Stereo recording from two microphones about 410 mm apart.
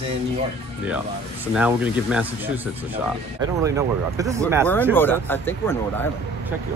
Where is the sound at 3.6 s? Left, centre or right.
Centre.